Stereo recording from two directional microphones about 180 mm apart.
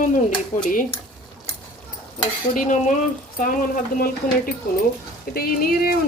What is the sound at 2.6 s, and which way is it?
Speech, 45° left (ahead or behind).